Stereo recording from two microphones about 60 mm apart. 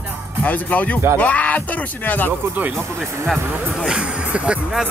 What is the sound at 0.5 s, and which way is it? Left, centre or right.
Speech, left.